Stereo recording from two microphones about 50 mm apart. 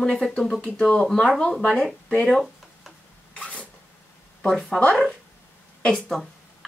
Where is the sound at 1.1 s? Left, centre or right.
Centre.